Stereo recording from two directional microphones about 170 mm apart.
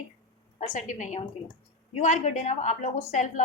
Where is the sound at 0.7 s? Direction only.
45° left (ahead or behind).